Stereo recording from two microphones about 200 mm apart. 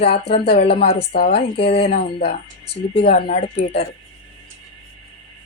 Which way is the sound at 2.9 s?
45° left (ahead or behind).